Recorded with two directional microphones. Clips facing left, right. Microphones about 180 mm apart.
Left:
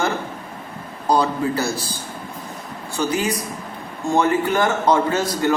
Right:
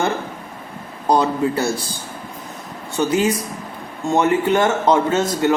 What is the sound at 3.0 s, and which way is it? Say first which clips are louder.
A man's voice: right 4 dB; 25° right (ahead or behind).